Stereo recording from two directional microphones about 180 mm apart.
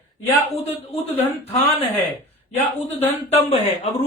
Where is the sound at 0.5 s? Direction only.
35° left (ahead or behind).